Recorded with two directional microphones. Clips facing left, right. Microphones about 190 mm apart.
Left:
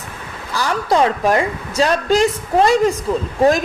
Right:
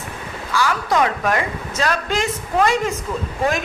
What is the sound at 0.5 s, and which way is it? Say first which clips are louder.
Speech: left 2 dB; 35° left (ahead or behind).